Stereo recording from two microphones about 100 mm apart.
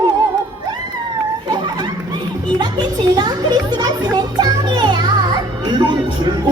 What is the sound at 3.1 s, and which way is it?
Music, 45° right (ahead or behind).